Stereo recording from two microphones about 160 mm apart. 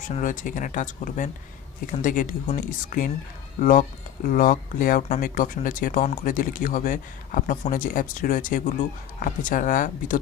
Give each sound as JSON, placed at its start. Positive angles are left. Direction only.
{"t": 0.0, "sound": "speech", "side_deg": 55}